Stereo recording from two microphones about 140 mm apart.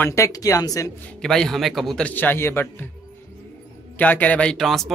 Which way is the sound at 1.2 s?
5° left (ahead or behind).